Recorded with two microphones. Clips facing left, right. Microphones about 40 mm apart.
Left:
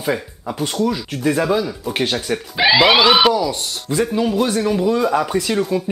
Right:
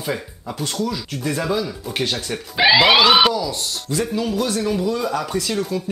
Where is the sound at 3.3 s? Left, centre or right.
Centre.